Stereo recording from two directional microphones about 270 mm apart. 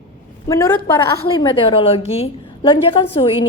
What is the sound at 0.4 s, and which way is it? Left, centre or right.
A woman's voice, centre.